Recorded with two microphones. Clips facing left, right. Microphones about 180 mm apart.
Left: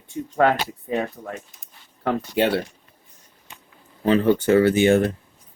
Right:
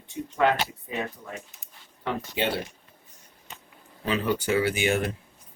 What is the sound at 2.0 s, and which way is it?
Speech, 55° left (ahead or behind).